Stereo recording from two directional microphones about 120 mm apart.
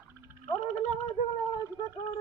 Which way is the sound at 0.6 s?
75° left (ahead or behind).